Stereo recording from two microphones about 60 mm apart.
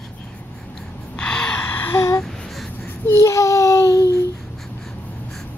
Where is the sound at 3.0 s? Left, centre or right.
Left.